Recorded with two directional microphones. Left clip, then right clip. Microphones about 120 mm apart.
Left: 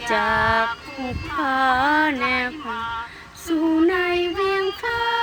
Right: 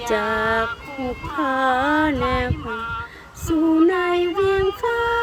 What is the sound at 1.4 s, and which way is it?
Music, 50° right (ahead or behind).